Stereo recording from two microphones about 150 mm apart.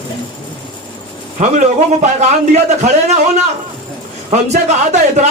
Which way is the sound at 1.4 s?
55° right (ahead or behind).